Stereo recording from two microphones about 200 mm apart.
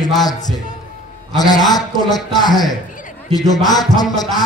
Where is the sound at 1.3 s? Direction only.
20° left (ahead or behind).